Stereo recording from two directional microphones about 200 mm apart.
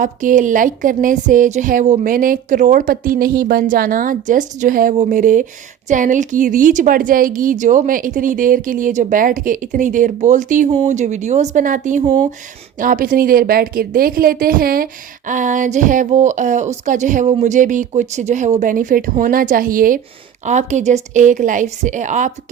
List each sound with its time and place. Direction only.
0.0 s a woman's voice: 40° right (ahead or behind)